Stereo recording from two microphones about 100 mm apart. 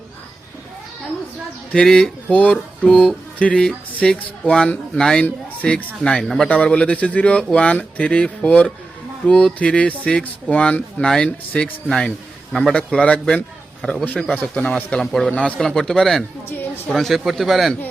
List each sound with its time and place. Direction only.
1.7 s speech: 5° left (ahead or behind)
15.0 s speech: centre (ahead or behind)
16.5 s a woman's voice: 20° left (ahead or behind)
16.9 s speech: centre (ahead or behind)